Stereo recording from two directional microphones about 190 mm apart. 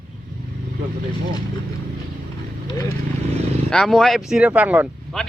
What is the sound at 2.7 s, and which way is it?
Vehicle, 20° left (ahead or behind).